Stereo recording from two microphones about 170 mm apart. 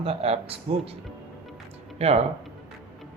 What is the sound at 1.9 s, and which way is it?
Speech, 40° right (ahead or behind).